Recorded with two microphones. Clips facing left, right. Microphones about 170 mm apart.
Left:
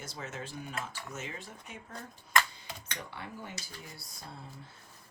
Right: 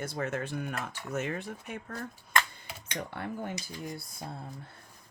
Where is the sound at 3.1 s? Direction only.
55° right (ahead or behind).